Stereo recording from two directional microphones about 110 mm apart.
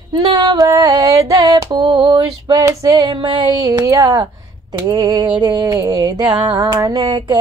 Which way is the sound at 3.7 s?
30° right (ahead or behind).